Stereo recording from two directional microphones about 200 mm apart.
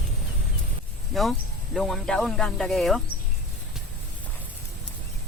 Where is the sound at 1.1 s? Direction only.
Centre (ahead or behind).